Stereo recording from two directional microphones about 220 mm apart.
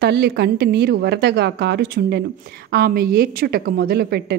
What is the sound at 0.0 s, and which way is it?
Speech, 50° right (ahead or behind).